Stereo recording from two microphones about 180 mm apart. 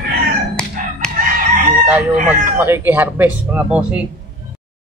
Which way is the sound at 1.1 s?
50° right (ahead or behind).